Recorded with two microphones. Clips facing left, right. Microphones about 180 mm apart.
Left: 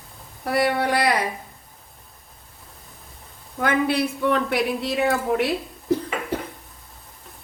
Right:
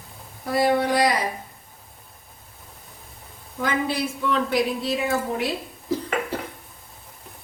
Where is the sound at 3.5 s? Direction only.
60° left (ahead or behind).